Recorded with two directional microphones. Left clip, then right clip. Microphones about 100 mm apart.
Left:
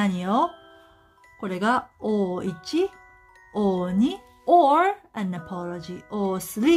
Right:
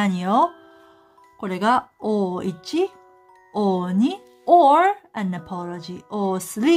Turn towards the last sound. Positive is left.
turn(degrees=-40)  # may be behind; listen again after turning